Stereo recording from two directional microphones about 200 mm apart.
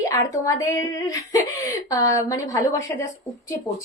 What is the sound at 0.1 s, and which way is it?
Speech, 15° left (ahead or behind).